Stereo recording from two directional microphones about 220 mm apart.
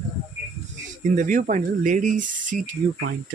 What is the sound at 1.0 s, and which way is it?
Speech, 35° right (ahead or behind).